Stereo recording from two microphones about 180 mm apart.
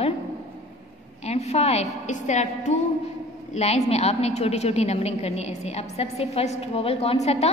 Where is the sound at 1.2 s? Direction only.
35° left (ahead or behind).